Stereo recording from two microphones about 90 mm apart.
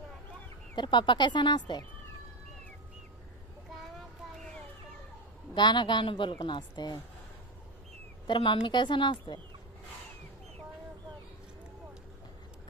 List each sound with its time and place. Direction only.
0.7 s a woman's voice: 60° left (ahead or behind)
5.5 s a woman's voice: 55° left (ahead or behind)
8.3 s a woman's voice: 75° left (ahead or behind); by 9.4 s 60° left (ahead or behind)